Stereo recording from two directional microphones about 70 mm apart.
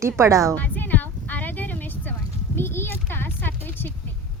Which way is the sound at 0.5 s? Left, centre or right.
Left.